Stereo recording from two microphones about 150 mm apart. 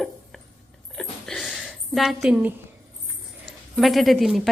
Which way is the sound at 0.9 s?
Centre (ahead or behind).